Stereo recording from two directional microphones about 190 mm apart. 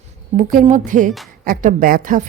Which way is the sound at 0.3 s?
40° right (ahead or behind).